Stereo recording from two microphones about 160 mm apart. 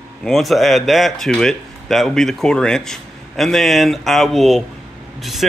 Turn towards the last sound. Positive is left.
turn(degrees=0)  # may be behind; listen again after turning